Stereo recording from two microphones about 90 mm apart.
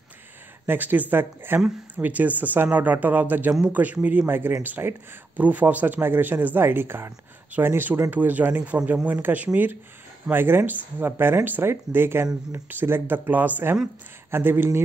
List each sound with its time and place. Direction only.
0.7 s a man's voice: 20° right (ahead or behind)